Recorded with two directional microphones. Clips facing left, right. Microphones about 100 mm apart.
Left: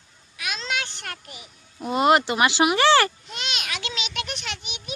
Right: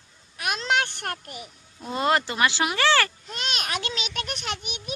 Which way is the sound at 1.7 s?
15° left (ahead or behind).